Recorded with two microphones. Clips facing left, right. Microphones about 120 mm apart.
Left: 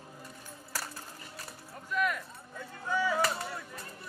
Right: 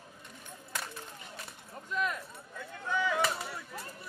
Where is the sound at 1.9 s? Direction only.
30° right (ahead or behind).